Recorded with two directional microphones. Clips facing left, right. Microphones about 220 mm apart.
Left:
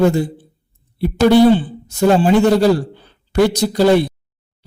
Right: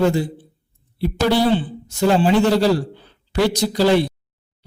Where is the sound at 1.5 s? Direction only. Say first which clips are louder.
Left 3 dB; 45° left (ahead or behind).